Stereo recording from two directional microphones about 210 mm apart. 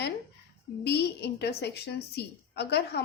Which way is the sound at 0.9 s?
50° left (ahead or behind).